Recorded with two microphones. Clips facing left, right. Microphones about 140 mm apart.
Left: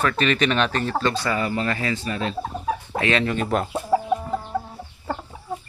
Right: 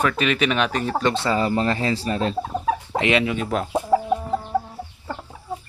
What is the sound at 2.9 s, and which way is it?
Speech, 15° right (ahead or behind).